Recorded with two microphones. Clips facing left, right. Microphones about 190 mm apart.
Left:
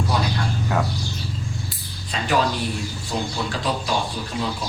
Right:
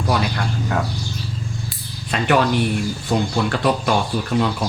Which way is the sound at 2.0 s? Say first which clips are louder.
Right 4 dB; 65° right (ahead or behind).